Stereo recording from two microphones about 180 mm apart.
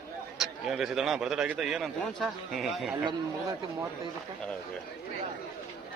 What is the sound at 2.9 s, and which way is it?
Speech, 20° right (ahead or behind).